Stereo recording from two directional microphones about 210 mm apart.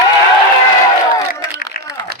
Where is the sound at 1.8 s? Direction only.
45° left (ahead or behind).